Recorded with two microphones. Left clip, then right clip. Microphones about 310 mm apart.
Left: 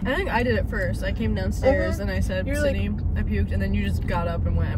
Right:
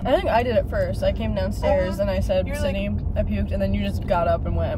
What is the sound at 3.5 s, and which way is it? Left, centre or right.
Speech, right.